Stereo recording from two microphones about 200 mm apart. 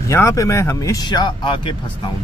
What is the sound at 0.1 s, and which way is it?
Speech, 15° left (ahead or behind).